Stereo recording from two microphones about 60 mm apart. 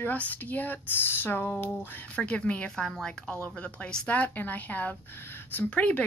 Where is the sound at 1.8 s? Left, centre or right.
Left.